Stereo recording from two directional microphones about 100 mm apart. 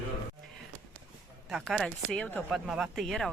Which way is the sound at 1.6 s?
5° left (ahead or behind).